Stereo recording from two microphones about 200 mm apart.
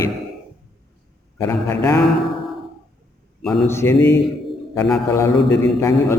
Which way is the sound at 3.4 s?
Centre (ahead or behind).